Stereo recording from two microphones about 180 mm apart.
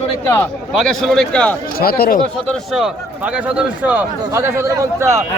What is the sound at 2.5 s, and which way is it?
Speech, centre (ahead or behind).